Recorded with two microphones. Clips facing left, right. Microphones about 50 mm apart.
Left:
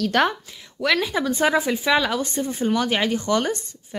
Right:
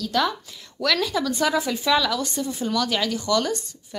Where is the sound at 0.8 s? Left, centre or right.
Left.